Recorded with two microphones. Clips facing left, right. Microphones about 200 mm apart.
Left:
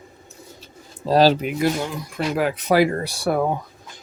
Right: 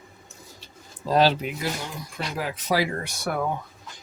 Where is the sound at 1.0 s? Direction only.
35° left (ahead or behind).